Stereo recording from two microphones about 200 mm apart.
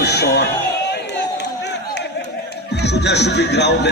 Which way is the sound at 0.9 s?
60° left (ahead or behind).